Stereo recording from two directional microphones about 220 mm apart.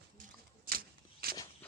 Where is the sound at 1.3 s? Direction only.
15° left (ahead or behind).